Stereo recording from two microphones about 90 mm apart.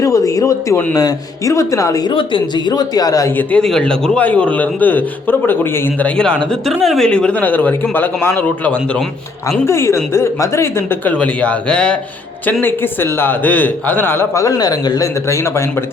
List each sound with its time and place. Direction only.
0.0 s a sound: 40° left (ahead or behind)
0.9 s speech: 40° left (ahead or behind)
2.0 s speech: 60° left (ahead or behind)
2.7 s speech: 45° left (ahead or behind)
3.5 s a man's voice: 5° left (ahead or behind); by 6.1 s 25° left (ahead or behind)
6.1 s a man's voice: 10° left (ahead or behind)
9.6 s a man's voice: 30° left (ahead or behind)
11.2 s a man's voice: 15° left (ahead or behind)
12.6 s a man's voice: 25° left (ahead or behind)
14.4 s speech: 50° left (ahead or behind)